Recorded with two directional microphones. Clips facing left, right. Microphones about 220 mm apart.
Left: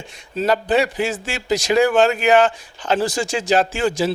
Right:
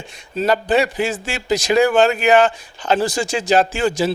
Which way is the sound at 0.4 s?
15° right (ahead or behind).